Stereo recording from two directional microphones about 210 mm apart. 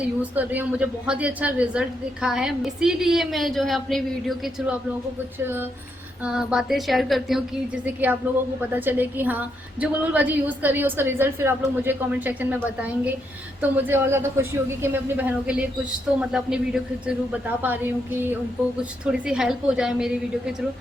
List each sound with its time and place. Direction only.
0.0 s a woman's voice: 5° right (ahead or behind)
6.2 s a woman's voice: 5° right (ahead or behind)
8.7 s a woman's voice: 10° right (ahead or behind)
13.6 s a woman's voice: 10° right (ahead or behind)
18.8 s a woman's voice: 5° right (ahead or behind)